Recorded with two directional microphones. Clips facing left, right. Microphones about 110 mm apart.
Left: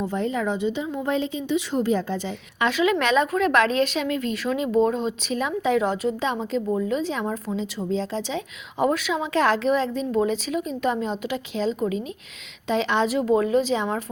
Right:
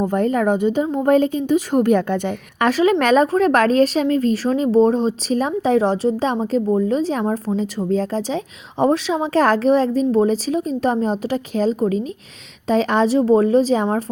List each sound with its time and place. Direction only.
0.0 s speech: 50° right (ahead or behind)
2.6 s speech: 40° right (ahead or behind)